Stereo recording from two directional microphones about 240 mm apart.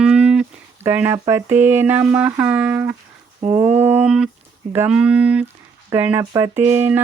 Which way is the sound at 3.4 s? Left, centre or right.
Right.